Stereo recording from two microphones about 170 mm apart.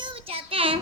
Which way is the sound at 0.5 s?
35° right (ahead or behind).